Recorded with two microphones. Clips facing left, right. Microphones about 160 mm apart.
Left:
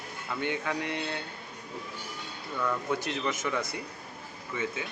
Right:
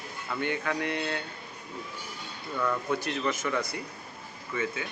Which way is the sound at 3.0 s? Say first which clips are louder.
Right 1 dB; 20° left (ahead or behind).